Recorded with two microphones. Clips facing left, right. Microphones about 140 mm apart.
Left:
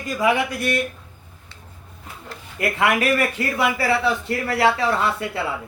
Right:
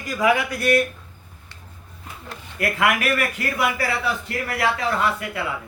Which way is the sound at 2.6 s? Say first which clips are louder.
Left 1 dB; 25° left (ahead or behind).